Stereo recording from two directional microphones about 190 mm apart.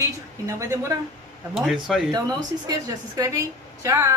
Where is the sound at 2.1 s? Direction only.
20° right (ahead or behind).